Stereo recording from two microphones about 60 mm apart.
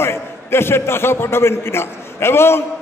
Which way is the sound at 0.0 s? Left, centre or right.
Left.